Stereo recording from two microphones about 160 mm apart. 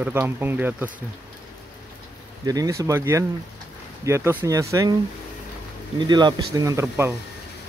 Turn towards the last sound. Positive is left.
turn(degrees=-15)  # may be behind; listen again after turning